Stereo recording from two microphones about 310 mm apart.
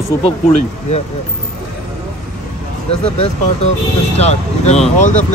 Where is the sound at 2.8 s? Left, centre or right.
Centre.